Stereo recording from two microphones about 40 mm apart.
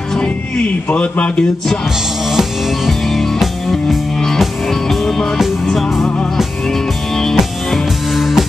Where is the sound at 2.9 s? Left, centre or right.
Centre.